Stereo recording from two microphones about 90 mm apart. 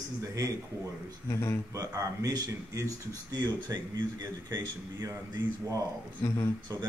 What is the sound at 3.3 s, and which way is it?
Speech, 50° right (ahead or behind).